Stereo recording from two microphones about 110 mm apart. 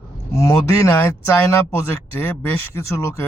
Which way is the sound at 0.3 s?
30° left (ahead or behind).